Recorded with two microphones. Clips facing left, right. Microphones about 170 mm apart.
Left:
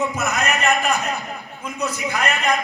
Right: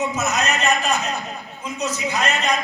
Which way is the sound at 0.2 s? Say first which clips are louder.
Even; 55° left (ahead or behind).